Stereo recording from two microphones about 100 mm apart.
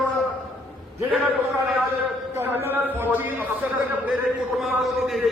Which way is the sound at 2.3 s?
20° right (ahead or behind).